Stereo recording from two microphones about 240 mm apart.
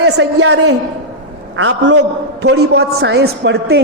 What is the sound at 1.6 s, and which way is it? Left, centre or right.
A woman's voice, right.